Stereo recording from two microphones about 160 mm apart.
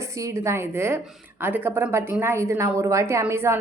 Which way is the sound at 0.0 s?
20° right (ahead or behind).